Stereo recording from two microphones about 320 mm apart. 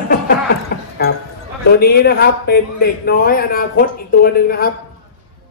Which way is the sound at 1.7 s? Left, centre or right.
Left.